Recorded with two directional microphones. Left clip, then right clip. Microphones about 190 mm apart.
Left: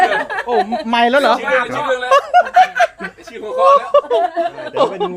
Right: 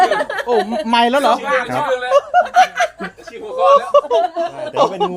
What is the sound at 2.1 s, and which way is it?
Speech, 45° left (ahead or behind).